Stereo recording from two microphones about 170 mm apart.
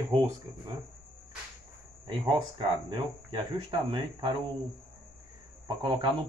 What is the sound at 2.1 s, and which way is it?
Speech, 30° right (ahead or behind).